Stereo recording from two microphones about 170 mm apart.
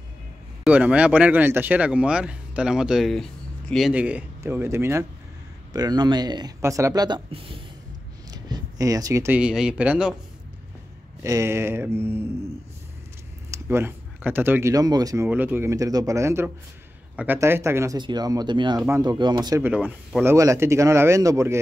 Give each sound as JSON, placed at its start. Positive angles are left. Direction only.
{"t": 0.7, "sound": "speech", "side_deg": -5}
{"t": 11.2, "sound": "speech", "side_deg": -15}
{"t": 13.5, "sound": "speech", "side_deg": -15}
{"t": 15.2, "sound": "speech", "side_deg": -10}
{"t": 19.9, "sound": "speech", "side_deg": 0}
{"t": 20.2, "sound": "speech", "side_deg": -15}